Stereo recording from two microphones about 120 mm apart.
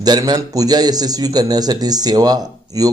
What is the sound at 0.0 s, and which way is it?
Speech, 35° right (ahead or behind).